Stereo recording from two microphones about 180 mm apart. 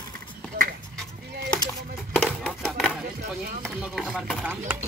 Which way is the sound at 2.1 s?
5° left (ahead or behind).